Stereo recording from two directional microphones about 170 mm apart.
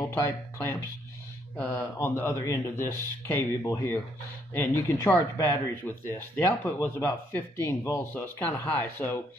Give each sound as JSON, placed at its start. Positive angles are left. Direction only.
{"t": 0.0, "sound": "speech", "side_deg": 15}